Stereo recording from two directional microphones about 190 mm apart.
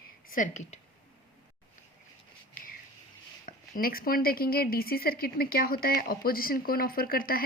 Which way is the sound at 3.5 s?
50° left (ahead or behind).